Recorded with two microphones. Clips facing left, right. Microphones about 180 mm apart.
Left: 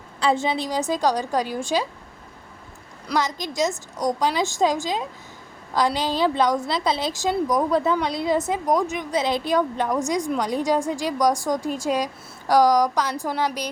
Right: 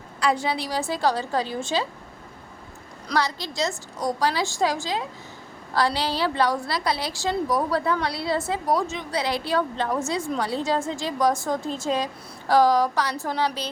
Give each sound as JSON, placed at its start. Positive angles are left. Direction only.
{"t": 0.2, "sound": "a woman's voice", "side_deg": 25}
{"t": 3.2, "sound": "a woman's voice", "side_deg": 15}